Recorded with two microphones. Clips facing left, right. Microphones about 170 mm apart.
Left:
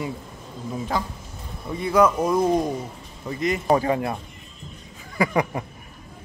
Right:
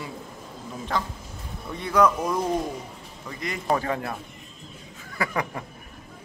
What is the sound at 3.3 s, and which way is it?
Speech, 25° left (ahead or behind).